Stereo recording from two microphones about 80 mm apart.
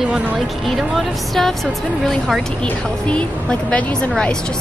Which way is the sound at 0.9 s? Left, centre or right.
Centre.